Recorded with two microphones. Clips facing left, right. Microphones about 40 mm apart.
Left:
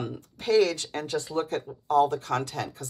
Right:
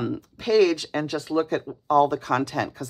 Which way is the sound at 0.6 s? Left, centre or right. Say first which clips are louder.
Right 7 dB; right.